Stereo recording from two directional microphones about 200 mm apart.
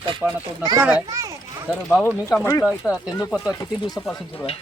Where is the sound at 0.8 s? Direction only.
10° right (ahead or behind).